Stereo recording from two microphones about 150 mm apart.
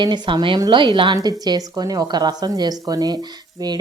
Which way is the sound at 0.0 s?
30° right (ahead or behind).